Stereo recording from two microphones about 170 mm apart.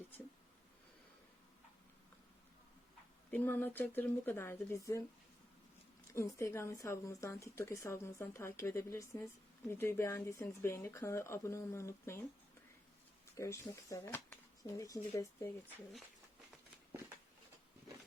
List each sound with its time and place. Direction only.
3.3 s a woman's voice: 10° left (ahead or behind)
6.1 s a woman's voice: 20° left (ahead or behind)
13.3 s a woman's voice: 15° left (ahead or behind)